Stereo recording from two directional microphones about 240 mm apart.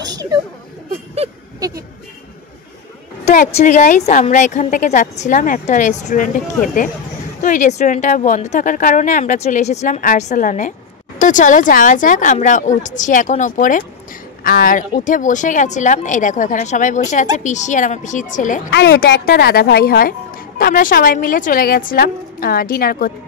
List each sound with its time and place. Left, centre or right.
0.1 s a sound: centre
3.3 s speech: left
18.7 s speech: left